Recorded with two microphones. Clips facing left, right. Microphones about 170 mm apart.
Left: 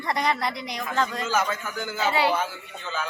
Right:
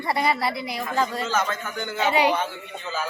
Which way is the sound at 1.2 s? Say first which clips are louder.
Even; 10° left (ahead or behind).